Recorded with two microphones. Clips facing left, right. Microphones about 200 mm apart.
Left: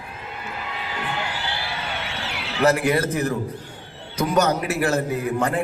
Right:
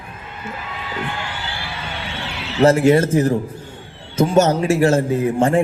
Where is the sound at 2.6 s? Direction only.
25° right (ahead or behind).